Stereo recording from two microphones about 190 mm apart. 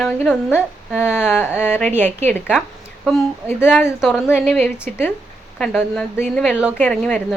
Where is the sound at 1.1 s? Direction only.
10° left (ahead or behind).